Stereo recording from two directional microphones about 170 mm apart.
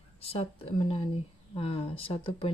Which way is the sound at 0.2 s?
35° left (ahead or behind).